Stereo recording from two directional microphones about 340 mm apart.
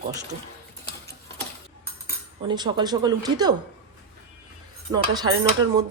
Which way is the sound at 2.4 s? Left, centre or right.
Centre.